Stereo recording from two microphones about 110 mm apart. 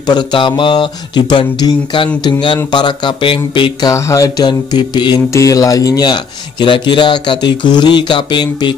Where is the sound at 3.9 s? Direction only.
30° left (ahead or behind).